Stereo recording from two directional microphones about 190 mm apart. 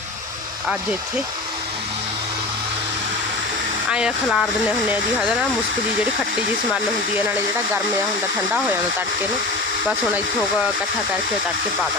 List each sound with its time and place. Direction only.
3.9 s speech: centre (ahead or behind)